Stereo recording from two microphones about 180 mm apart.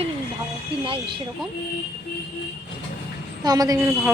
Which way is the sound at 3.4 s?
20° right (ahead or behind).